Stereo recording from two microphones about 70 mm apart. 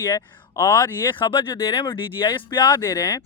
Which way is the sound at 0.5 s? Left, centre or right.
Left.